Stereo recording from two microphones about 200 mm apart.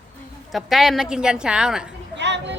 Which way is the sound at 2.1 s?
60° right (ahead or behind).